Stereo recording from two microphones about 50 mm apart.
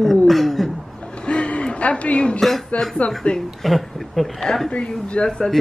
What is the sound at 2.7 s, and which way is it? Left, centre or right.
Speech, left.